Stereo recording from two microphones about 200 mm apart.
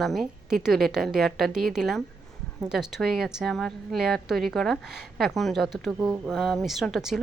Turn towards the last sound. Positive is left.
turn(degrees=0)  # may be behind; listen again after turning